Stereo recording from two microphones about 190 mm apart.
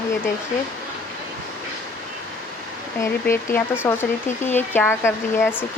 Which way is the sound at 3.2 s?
10° left (ahead or behind).